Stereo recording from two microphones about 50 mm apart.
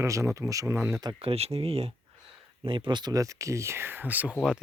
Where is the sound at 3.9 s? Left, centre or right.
Right.